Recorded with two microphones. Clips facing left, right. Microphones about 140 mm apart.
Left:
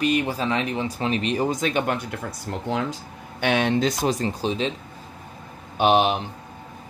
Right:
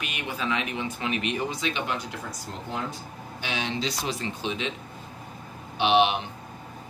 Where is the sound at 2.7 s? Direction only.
85° left.